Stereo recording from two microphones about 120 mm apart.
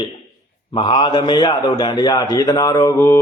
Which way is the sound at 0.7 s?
45° left (ahead or behind).